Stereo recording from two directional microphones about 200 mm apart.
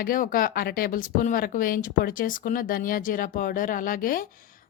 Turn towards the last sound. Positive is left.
turn(degrees=45)  # may be behind; listen again after turning